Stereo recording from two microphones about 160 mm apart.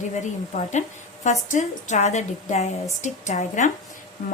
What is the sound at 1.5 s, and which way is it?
A woman's voice, 45° left (ahead or behind).